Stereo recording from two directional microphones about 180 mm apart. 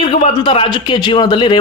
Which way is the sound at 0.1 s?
30° left (ahead or behind).